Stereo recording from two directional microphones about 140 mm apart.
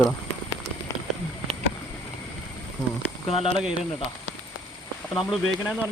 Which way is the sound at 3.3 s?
45° left (ahead or behind).